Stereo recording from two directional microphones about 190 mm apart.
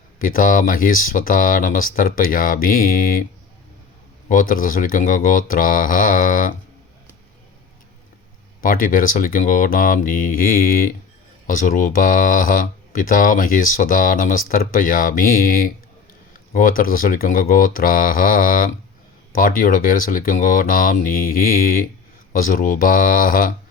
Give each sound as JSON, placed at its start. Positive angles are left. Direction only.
{"t": 0.2, "sound": "speech", "side_deg": 45}
{"t": 4.3, "sound": "speech", "side_deg": 45}
{"t": 8.6, "sound": "speech", "side_deg": 45}